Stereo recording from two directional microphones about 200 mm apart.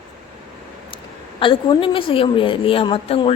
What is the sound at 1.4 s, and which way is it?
A woman's voice, 25° left (ahead or behind).